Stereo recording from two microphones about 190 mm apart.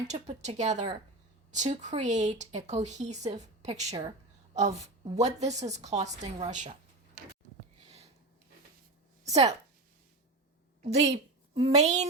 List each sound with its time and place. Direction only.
0.1 s a woman's voice: 35° right (ahead or behind)
9.2 s speech: 35° right (ahead or behind)
10.8 s a woman's voice: 35° right (ahead or behind)